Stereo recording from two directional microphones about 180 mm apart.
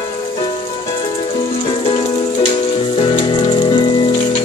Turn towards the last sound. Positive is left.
turn(degrees=25)  # may be behind; listen again after turning